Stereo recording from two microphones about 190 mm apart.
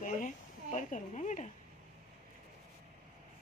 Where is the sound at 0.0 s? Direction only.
40° left (ahead or behind).